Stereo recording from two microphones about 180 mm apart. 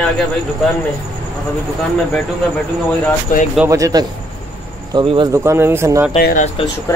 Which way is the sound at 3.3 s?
50° left (ahead or behind).